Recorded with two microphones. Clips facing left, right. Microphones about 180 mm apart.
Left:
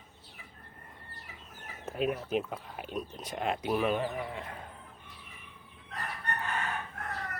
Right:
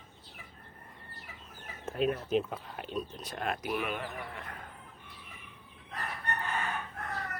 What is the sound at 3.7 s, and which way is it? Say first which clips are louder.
Speech: left 6 dB; 35° left (ahead or behind).